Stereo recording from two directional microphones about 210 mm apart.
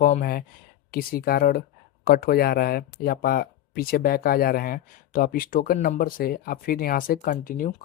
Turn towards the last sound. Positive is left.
turn(degrees=40)  # may be behind; listen again after turning